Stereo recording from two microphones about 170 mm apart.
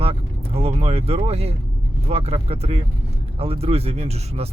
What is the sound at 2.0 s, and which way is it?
Speech, 35° right (ahead or behind).